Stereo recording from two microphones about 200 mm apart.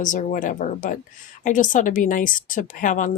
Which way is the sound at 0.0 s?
40° left (ahead or behind).